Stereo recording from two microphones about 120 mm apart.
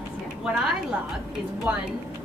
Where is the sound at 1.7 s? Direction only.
10° right (ahead or behind).